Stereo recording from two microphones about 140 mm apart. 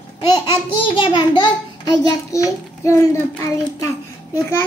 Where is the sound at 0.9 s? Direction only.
35° left (ahead or behind); by 3.2 s 20° left (ahead or behind).